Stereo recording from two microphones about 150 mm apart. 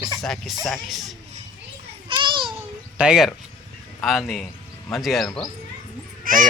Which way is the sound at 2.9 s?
5° right (ahead or behind).